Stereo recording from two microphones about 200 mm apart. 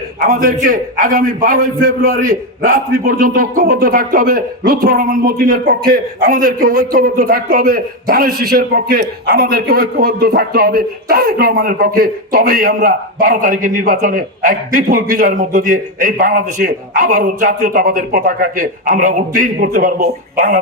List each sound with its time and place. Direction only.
0.3 s a man's voice: 45° right (ahead or behind)